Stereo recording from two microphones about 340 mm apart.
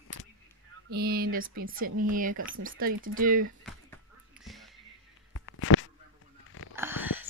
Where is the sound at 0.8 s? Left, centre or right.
Right.